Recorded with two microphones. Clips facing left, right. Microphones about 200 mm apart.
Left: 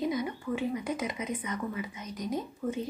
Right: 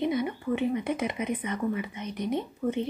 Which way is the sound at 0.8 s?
60° right (ahead or behind).